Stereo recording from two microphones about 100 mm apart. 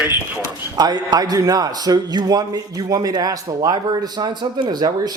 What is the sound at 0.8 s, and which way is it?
A man's voice, 45° right (ahead or behind).